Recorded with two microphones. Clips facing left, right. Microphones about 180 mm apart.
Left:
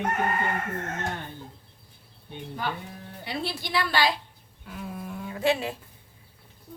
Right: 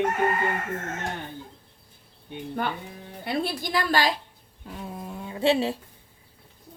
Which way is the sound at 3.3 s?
50° right (ahead or behind).